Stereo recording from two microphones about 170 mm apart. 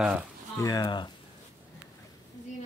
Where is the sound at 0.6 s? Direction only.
20° left (ahead or behind).